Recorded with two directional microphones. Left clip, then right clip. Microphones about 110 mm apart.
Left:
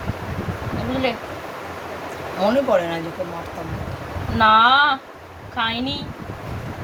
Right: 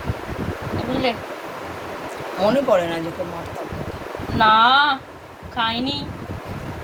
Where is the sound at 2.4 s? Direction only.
40° right (ahead or behind).